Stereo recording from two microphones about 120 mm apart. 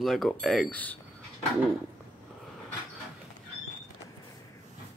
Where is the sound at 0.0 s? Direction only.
Centre (ahead or behind).